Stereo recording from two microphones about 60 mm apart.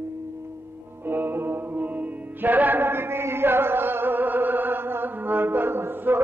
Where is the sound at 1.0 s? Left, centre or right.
Right.